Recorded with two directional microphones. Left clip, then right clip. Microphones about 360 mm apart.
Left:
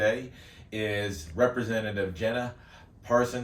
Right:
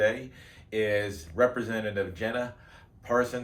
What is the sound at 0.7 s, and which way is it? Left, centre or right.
Speech, centre.